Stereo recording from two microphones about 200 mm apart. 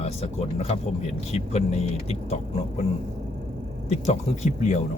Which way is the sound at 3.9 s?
35° left (ahead or behind).